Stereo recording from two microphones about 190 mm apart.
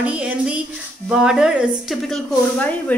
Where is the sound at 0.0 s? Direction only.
5° right (ahead or behind).